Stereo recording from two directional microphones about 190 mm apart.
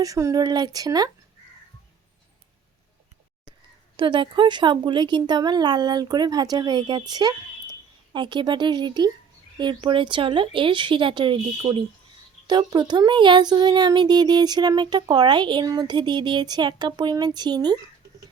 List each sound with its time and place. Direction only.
0.0 s speech: 20° right (ahead or behind)
3.9 s a woman's voice: 25° right (ahead or behind)